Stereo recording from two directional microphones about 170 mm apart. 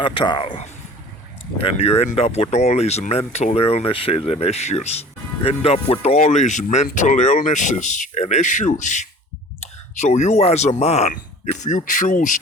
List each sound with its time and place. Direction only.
0.0 s speech: 30° left (ahead or behind)
1.6 s speech: 35° left (ahead or behind)